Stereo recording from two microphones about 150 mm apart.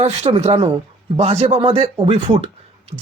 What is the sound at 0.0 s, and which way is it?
A woman's voice, 40° right (ahead or behind).